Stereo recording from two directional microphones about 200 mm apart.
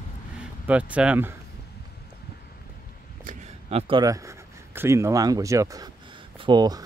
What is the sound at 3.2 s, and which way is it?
Speech, 35° right (ahead or behind).